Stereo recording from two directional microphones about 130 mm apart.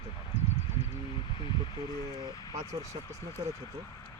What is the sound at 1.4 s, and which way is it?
Speech, 40° left (ahead or behind).